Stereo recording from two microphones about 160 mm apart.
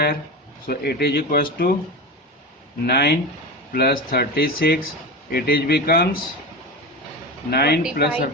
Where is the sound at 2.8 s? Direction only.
85° left.